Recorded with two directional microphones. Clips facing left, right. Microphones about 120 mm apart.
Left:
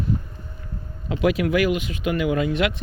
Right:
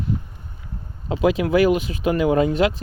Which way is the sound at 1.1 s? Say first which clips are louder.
Right 2 dB; 25° right (ahead or behind).